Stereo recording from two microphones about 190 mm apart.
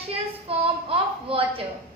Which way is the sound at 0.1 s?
30° right (ahead or behind).